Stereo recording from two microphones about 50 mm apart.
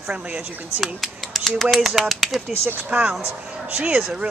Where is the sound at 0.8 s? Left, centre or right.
Centre.